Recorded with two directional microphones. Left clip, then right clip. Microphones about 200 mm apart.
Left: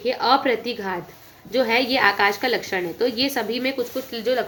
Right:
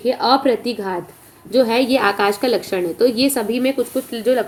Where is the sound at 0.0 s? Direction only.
35° right (ahead or behind).